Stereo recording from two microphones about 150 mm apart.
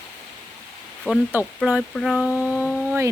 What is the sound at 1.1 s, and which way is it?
Speech, 10° right (ahead or behind).